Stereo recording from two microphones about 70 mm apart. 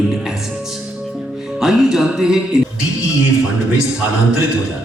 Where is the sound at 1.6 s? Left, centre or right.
Centre.